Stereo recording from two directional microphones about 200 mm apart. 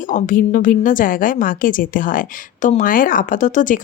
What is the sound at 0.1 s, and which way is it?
A woman's voice, 40° left (ahead or behind).